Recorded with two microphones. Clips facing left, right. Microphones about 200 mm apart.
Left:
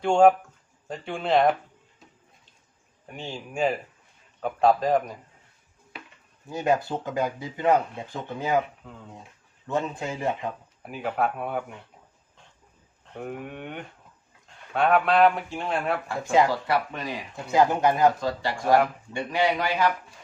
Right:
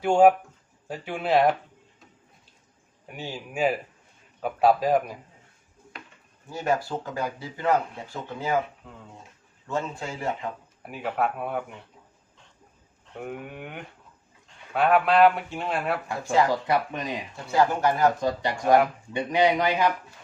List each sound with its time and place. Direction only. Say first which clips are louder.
0.0 s a man's voice: even; 5° right (ahead or behind)
3.1 s a man's voice: even; 5° right (ahead or behind)
6.5 s speech: left 2 dB; 20° left (ahead or behind)
8.8 s speech: left 2 dB; centre (ahead or behind)
9.6 s a man's voice: left 2 dB; 20° left (ahead or behind)
10.8 s speech: even; centre (ahead or behind)
13.1 s speech: left 1 dB; centre (ahead or behind)
16.2 s speech: left 2 dB; 20° left (ahead or behind)
16.5 s a man's voice: right 1 dB; 20° right (ahead or behind)
17.3 s speech: left 2 dB; 20° left (ahead or behind)
18.2 s a man's voice: right 2 dB; 20° right (ahead or behind)